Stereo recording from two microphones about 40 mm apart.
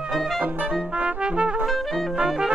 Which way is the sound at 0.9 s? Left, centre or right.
Right.